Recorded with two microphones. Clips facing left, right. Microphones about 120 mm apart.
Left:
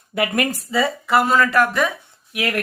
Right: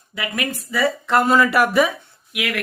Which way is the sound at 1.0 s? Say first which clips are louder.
Right 1 dB; 5° left (ahead or behind).